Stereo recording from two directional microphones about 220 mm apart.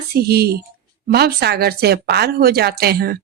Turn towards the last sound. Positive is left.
turn(degrees=-45)  # may be behind; listen again after turning